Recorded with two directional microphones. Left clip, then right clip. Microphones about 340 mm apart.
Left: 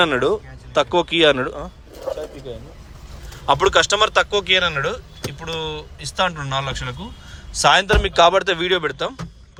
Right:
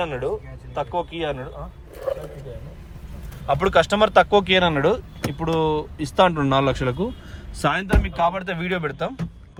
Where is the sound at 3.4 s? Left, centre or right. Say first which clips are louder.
Left 3 dB; centre.